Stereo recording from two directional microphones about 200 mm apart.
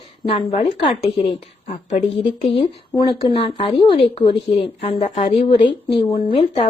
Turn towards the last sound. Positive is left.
turn(degrees=25)  # may be behind; listen again after turning